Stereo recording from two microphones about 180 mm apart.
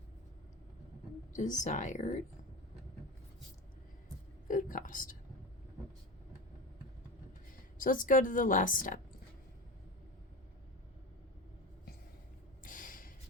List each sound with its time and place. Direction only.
1.3 s a woman's voice: 45° left (ahead or behind)
4.4 s speech: 50° left (ahead or behind)
7.8 s a woman's voice: 50° left (ahead or behind)
12.6 s snort: 50° left (ahead or behind)